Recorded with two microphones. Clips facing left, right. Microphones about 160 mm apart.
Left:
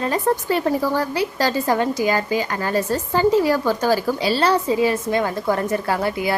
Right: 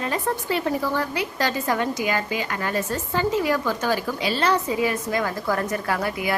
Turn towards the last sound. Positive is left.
turn(degrees=30)  # may be behind; listen again after turning